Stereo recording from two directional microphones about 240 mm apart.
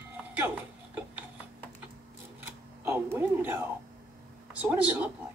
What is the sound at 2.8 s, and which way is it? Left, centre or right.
A woman's voice, centre.